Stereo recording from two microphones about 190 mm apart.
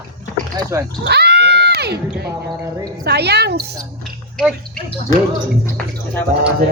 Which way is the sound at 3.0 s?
60° right (ahead or behind).